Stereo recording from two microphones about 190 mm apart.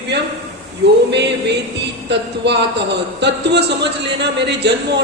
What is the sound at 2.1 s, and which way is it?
A man's voice, 65° right (ahead or behind).